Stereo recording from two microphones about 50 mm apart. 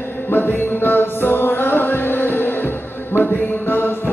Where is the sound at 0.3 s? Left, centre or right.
Left.